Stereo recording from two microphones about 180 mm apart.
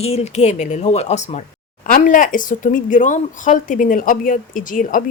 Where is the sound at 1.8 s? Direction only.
50° left (ahead or behind).